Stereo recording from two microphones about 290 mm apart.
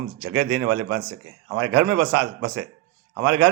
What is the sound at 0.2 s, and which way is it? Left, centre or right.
A man's voice, right.